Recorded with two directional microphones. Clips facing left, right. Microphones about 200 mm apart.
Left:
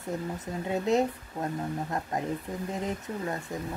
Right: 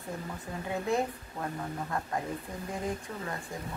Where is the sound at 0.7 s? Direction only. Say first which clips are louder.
Left 5 dB; 20° left (ahead or behind).